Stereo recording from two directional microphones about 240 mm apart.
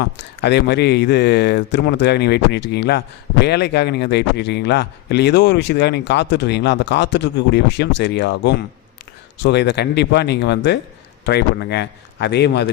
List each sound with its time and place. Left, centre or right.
0.0 s speech: left